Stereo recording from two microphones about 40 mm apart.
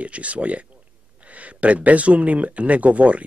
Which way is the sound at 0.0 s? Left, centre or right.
Right.